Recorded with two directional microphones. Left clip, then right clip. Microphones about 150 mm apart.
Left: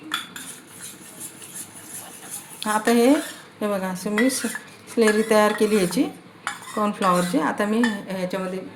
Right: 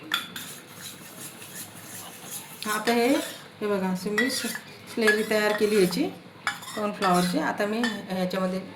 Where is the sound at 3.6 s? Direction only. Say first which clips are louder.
Left 2 dB; 65° left (ahead or behind); by 8.4 s 90° left.